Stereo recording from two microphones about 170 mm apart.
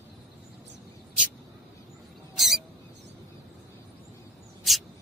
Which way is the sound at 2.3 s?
Centre (ahead or behind).